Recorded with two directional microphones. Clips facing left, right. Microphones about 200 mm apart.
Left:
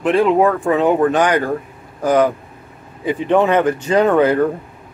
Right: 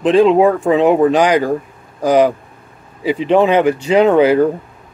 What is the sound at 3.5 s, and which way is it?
Speech, 10° right (ahead or behind).